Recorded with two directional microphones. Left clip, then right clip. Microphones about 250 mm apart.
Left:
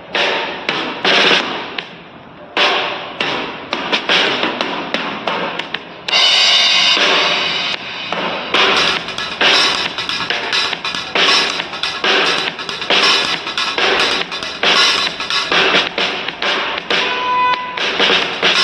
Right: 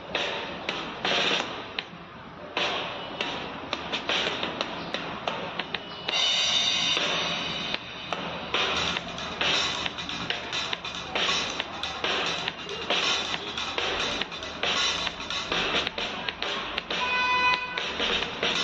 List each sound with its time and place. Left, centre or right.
0.1 s a sound: left
2.5 s hammer: left
6.0 s music: left